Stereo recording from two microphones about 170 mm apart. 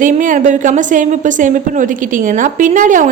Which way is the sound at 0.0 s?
50° right (ahead or behind).